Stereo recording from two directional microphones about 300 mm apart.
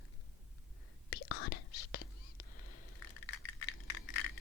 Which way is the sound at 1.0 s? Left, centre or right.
Left.